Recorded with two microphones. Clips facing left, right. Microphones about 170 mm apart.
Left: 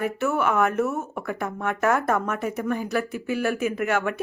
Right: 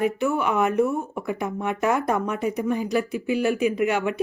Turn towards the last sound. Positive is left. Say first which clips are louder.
# right 2 dB
turn(degrees=-15)  # may be behind; listen again after turning